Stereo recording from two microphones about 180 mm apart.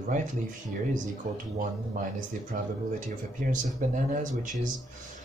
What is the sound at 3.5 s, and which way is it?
Speech, 45° right (ahead or behind).